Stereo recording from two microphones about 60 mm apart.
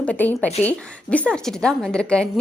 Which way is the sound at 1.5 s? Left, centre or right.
Centre.